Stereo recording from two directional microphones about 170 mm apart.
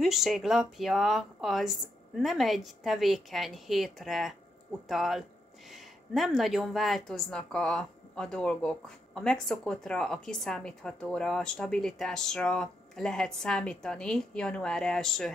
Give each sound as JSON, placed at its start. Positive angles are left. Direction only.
{"t": 0.0, "sound": "speech", "side_deg": 0}